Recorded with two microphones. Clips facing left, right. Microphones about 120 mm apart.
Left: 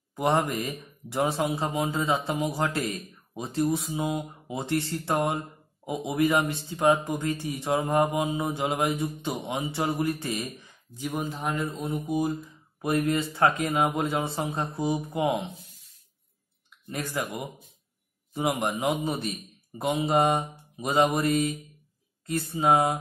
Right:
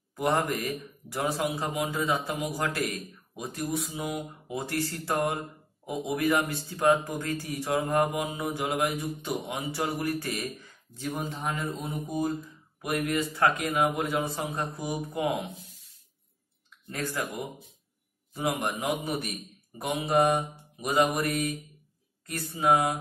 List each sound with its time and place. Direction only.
0.1 s speech: 20° left (ahead or behind)
11.1 s a man's voice: centre (ahead or behind)
12.8 s speech: 30° left (ahead or behind)
16.9 s speech: 20° left (ahead or behind)